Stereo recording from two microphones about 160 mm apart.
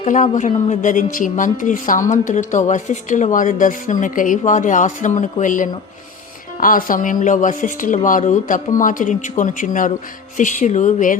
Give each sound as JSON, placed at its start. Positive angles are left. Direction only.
{"t": 0.0, "sound": "a woman's voice", "side_deg": 50}